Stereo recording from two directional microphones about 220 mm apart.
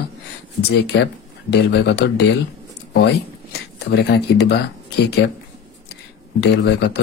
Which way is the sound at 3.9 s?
50° left (ahead or behind).